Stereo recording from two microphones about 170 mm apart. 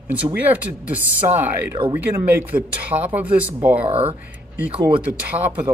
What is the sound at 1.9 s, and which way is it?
Speech, 10° right (ahead or behind).